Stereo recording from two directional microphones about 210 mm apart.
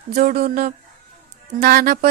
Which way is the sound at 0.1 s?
45° right (ahead or behind).